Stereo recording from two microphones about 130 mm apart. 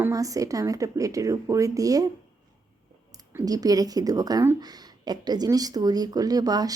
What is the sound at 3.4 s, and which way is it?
Speech, 30° right (ahead or behind).